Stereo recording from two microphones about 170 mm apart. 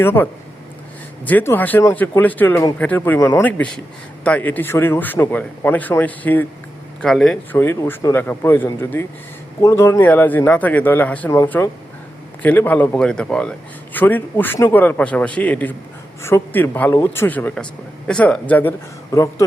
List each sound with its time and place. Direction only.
0.0 s a man's voice: 10° left (ahead or behind)
7.6 s a man's voice: 15° left (ahead or behind)